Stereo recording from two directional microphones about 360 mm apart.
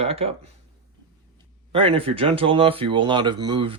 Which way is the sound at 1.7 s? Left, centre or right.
Centre.